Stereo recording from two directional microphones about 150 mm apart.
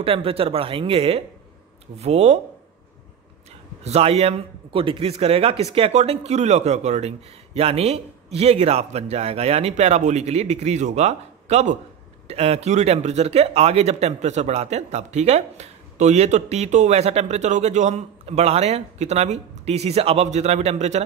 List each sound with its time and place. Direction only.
0.0 s speech: 40° right (ahead or behind)
3.8 s speech: 45° right (ahead or behind)